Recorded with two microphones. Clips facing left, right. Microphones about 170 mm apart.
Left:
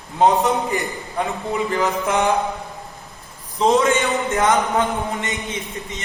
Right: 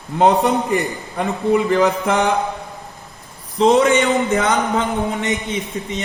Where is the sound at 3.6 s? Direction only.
70° right (ahead or behind).